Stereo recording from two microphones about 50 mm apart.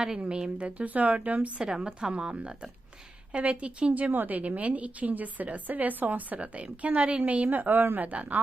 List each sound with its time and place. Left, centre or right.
0.2 s a woman's voice: centre
1.6 s a woman's voice: centre
4.1 s a woman's voice: right
7.5 s a woman's voice: right